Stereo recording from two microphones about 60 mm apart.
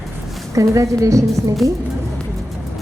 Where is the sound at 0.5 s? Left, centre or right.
Right.